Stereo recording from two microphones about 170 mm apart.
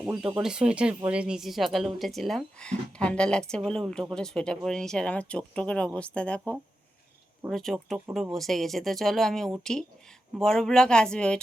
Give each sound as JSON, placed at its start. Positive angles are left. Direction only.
{"t": 0.0, "sound": "speech", "side_deg": -5}